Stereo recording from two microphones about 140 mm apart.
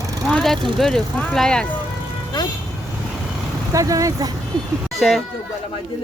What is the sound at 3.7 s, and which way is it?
Speech, 25° right (ahead or behind).